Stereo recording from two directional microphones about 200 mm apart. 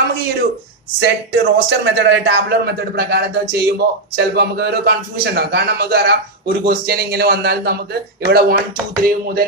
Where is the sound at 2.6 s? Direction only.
55° right (ahead or behind).